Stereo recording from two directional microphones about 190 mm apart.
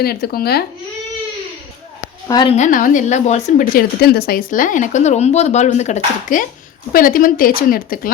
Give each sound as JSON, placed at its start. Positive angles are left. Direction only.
{"t": 0.0, "sound": "speech", "side_deg": 55}
{"t": 2.2, "sound": "a woman's voice", "side_deg": 20}
{"t": 2.5, "sound": "speech", "side_deg": 40}